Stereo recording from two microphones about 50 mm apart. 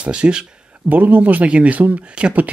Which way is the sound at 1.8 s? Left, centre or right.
Right.